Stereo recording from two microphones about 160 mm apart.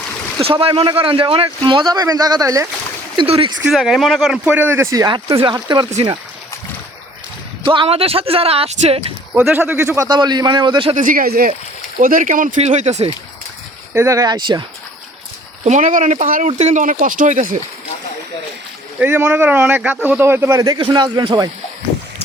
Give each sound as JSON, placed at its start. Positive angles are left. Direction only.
{"t": 0.4, "sound": "speech", "side_deg": -35}
{"t": 3.2, "sound": "speech", "side_deg": -35}
{"t": 3.6, "sound": "speech", "side_deg": 0}
{"t": 5.9, "sound": "speech", "side_deg": -40}
{"t": 7.6, "sound": "speech", "side_deg": -30}
{"t": 9.3, "sound": "speech", "side_deg": -10}
{"t": 10.9, "sound": "speech", "side_deg": -55}
{"t": 13.9, "sound": "speech", "side_deg": -20}
{"t": 15.6, "sound": "speech", "side_deg": -50}
{"t": 16.5, "sound": "speech", "side_deg": -45}
{"t": 18.9, "sound": "speech", "side_deg": -10}